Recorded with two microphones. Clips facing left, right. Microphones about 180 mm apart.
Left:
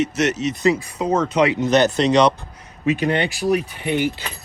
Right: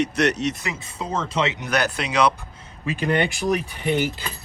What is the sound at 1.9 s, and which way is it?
Speech, 5° right (ahead or behind).